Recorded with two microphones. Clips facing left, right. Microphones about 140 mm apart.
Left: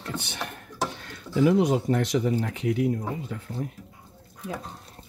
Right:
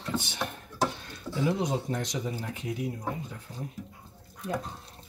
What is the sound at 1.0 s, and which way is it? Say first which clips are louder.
Speech: left 7 dB; 70° left (ahead or behind).